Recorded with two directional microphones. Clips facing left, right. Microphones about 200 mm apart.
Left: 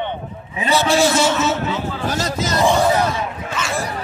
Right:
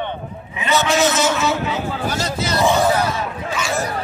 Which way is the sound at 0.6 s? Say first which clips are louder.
Left 1 dB; 35° left (ahead or behind).